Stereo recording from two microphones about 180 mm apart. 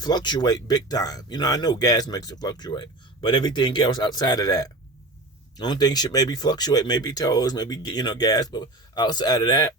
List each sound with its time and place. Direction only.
0.0 s speech: 25° left (ahead or behind)